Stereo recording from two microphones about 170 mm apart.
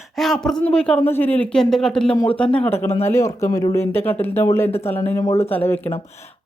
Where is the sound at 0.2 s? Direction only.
Centre (ahead or behind).